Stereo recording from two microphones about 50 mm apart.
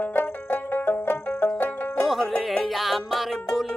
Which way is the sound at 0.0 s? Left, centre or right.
Left.